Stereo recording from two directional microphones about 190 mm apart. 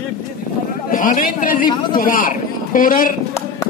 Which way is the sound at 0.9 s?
45° left (ahead or behind).